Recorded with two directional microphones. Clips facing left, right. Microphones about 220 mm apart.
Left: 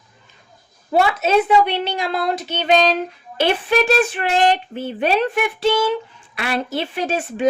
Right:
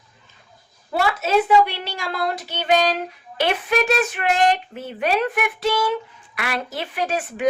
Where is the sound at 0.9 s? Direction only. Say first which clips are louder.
Left 3 dB; 20° left (ahead or behind).